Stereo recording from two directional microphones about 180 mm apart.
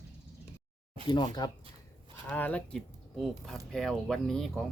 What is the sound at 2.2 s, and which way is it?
Speech, 10° left (ahead or behind).